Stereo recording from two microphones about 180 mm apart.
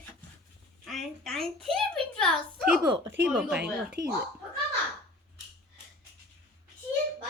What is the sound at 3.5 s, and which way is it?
Speech, 65° right (ahead or behind).